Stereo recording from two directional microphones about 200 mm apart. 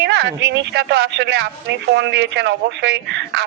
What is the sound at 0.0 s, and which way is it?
A woman's voice, 55° right (ahead or behind).